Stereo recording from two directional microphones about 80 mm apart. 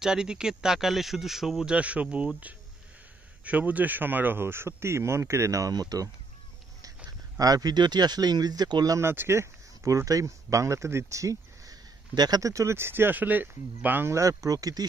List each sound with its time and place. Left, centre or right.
0.0 s speech: centre
1.8 s speech: centre; by 6.0 s right
7.1 s speech: right
8.9 s speech: right
14.1 s speech: right